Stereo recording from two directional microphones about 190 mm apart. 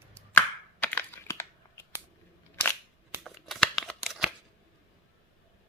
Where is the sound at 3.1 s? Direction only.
Centre (ahead or behind).